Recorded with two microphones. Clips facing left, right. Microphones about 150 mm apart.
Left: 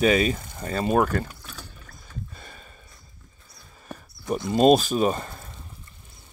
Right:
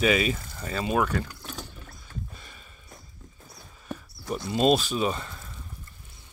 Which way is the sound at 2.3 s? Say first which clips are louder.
Left 3 dB; 40° left (ahead or behind).